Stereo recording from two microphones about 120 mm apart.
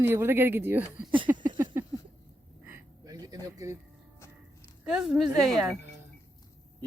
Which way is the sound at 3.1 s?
30° right (ahead or behind).